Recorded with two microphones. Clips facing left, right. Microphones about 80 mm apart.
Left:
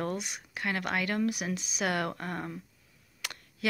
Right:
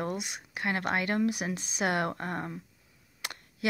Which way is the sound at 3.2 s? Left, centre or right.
Right.